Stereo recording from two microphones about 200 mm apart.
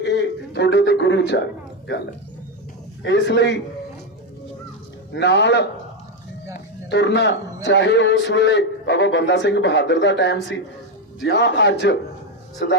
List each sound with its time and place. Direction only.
0.0 s a sound: 60° left (ahead or behind)
3.0 s a man's voice: 60° left (ahead or behind)
5.1 s a man's voice: 60° left (ahead or behind)